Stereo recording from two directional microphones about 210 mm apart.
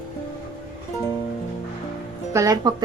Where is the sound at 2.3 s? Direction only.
15° right (ahead or behind).